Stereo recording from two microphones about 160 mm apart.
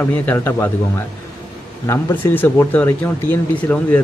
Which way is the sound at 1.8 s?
15° left (ahead or behind).